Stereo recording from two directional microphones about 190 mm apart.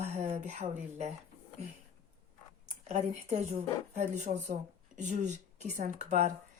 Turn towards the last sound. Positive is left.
turn(degrees=-40)  # may be behind; listen again after turning